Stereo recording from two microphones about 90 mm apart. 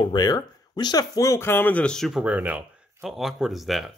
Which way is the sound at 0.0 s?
50° left (ahead or behind).